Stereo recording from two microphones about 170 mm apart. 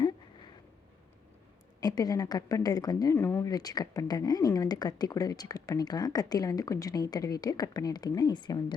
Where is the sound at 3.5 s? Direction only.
20° left (ahead or behind).